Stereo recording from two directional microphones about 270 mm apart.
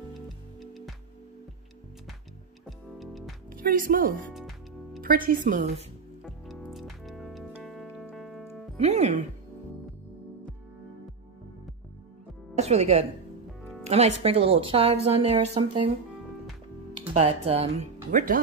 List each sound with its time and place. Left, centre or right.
0.6 s music: centre
3.0 s music: centre
3.5 s a woman's voice: right
6.2 s music: centre
8.7 s music: right
12.5 s a woman's voice: right
13.6 s music: centre
13.8 s a woman's voice: right
17.1 s a woman's voice: right